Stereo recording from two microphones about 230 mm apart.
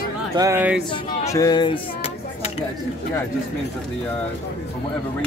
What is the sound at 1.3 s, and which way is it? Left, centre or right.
Speech, centre.